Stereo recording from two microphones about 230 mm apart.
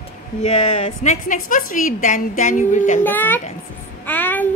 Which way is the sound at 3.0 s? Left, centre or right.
Centre.